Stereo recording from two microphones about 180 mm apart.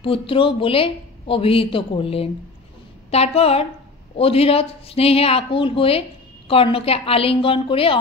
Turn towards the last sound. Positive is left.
turn(degrees=30)  # may be behind; listen again after turning